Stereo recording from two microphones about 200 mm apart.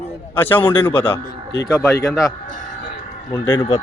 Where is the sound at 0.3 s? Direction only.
10° left (ahead or behind).